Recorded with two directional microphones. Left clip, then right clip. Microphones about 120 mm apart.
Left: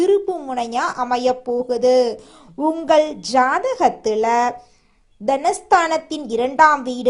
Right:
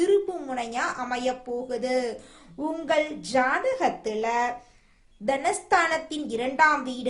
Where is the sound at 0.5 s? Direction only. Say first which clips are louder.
Left 7 dB; 50° left (ahead or behind).